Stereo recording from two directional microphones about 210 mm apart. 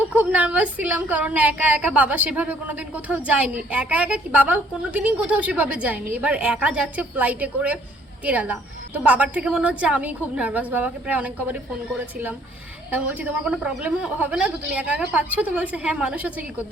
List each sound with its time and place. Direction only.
0.0 s a woman's voice: 5° right (ahead or behind)
12.9 s a woman's voice: 5° right (ahead or behind)